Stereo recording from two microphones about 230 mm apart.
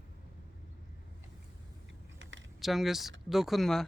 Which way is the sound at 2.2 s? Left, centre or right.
Right.